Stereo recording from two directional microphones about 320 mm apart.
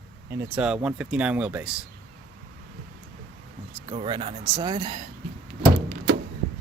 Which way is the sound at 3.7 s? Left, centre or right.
Centre.